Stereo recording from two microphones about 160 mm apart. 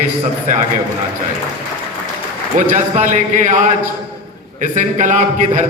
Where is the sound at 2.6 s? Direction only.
55° right (ahead or behind).